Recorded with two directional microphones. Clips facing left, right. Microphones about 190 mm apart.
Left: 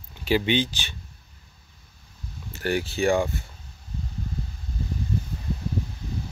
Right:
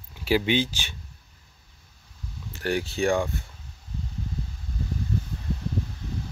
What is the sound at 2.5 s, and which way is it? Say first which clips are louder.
Speech: left 1 dB; centre (ahead or behind).